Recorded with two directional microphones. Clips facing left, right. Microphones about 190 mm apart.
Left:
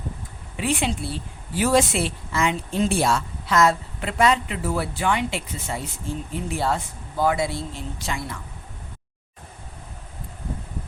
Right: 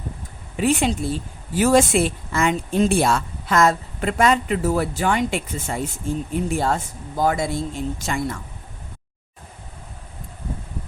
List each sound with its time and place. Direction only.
0.5 s speech: 45° right (ahead or behind)